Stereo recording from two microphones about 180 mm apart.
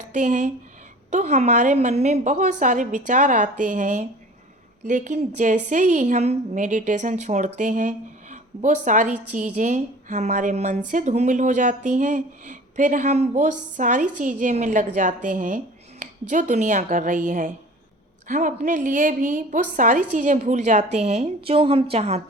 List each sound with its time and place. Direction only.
0.1 s a woman's voice: 45° right (ahead or behind)